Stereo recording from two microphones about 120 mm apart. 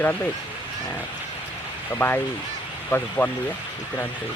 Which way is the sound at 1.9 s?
20° left (ahead or behind).